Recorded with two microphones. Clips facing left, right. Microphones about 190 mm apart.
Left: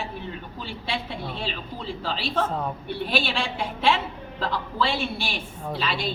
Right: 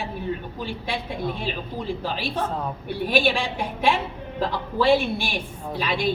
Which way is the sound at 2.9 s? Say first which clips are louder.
Right 7 dB; 15° right (ahead or behind).